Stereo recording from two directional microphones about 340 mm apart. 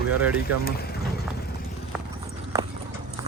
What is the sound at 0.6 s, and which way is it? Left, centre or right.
Speech, left.